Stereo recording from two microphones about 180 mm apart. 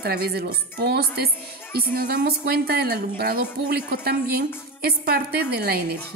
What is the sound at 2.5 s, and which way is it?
A woman's voice, 60° right (ahead or behind).